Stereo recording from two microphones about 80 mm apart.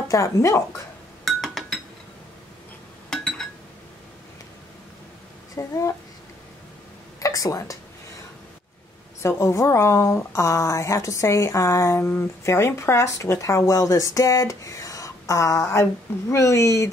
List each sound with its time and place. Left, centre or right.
0.1 s speech: left
1.2 s chink: centre
3.1 s a sound: centre
5.6 s speech: left
7.2 s a sound: left
9.4 s speech: left